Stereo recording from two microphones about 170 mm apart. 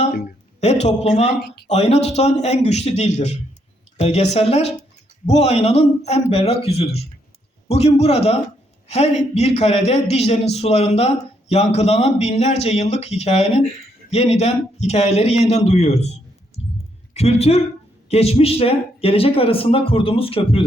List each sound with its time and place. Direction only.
0.6 s a man's voice: 40° left (ahead or behind)
16.6 s clicking: 35° left (ahead or behind)
17.2 s a man's voice: 40° left (ahead or behind)